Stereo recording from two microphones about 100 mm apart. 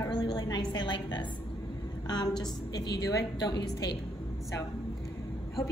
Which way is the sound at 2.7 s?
35° left (ahead or behind).